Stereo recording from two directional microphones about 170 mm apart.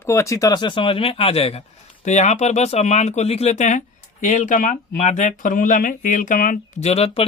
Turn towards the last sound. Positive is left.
turn(degrees=35)  # may be behind; listen again after turning